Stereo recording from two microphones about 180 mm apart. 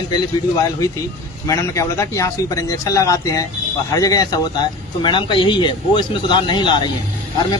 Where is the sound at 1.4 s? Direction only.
15° left (ahead or behind).